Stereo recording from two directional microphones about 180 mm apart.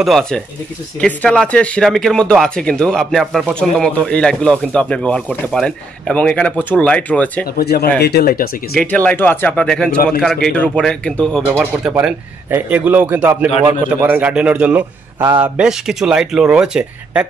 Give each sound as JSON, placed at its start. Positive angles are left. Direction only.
{"t": 0.0, "sound": "speech", "side_deg": 0}
{"t": 7.5, "sound": "speech", "side_deg": 60}
{"t": 8.9, "sound": "speech", "side_deg": 10}
{"t": 11.5, "sound": "a man's voice", "side_deg": -10}